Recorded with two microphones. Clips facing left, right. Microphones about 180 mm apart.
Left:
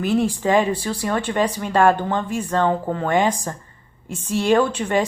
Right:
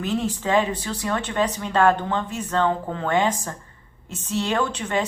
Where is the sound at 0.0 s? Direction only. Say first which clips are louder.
Left 5 dB; 10° left (ahead or behind).